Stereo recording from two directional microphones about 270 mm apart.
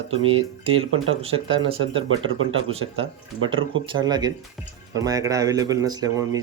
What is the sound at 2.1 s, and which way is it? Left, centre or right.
Speech, right.